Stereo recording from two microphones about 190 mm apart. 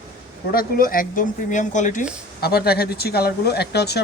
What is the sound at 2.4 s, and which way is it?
Speech, 55° left (ahead or behind).